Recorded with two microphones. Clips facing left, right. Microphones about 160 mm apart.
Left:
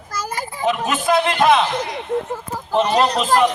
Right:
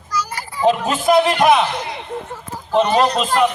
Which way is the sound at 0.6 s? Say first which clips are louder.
Right 4 dB; 35° right (ahead or behind).